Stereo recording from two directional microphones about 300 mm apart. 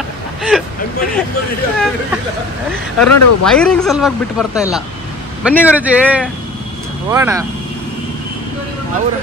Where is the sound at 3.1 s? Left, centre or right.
Left.